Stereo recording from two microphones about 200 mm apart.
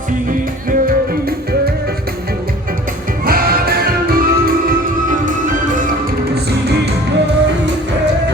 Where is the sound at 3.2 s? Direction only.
45° right (ahead or behind).